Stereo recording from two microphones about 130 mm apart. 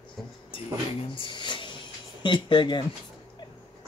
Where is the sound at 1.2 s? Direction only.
35° left (ahead or behind).